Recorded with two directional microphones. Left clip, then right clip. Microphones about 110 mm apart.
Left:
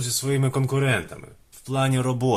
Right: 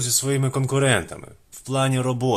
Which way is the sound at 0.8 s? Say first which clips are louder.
Right 6 dB; 40° right (ahead or behind).